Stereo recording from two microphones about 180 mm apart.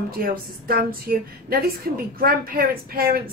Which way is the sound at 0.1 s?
55° right (ahead or behind).